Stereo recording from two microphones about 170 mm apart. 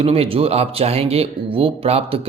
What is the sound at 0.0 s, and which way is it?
Speech, 35° right (ahead or behind).